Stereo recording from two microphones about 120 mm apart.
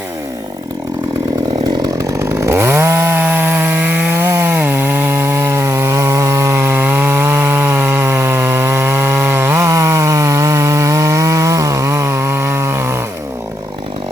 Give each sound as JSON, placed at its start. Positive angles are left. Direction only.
{"t": 1.8, "sound": "chainsaw", "side_deg": -30}